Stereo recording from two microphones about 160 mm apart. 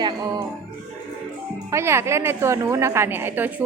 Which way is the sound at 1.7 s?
15° right (ahead or behind).